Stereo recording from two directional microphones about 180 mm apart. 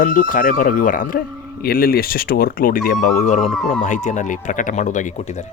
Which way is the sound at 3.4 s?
Centre (ahead or behind).